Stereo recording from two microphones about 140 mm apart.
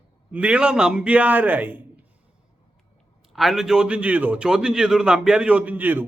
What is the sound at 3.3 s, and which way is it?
A man's voice, centre (ahead or behind).